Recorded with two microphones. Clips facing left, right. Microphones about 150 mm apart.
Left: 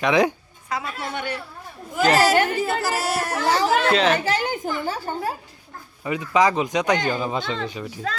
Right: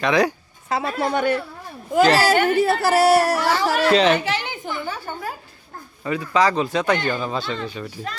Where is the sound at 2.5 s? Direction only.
65° right (ahead or behind).